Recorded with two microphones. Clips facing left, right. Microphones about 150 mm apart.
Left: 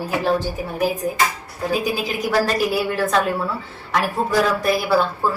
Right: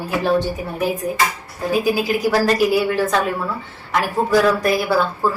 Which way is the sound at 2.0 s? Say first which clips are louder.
Right 3 dB; centre (ahead or behind).